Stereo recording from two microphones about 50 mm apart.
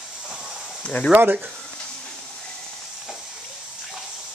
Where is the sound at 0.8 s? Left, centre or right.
Left.